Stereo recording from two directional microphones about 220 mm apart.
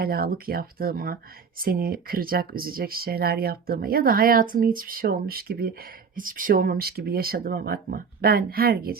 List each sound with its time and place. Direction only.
0.0 s speech: 40° right (ahead or behind)